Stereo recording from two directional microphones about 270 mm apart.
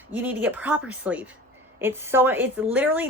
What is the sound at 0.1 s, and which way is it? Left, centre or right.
A woman's voice, centre.